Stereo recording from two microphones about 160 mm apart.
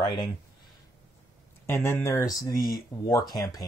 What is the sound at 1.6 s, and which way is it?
Speech, 15° left (ahead or behind).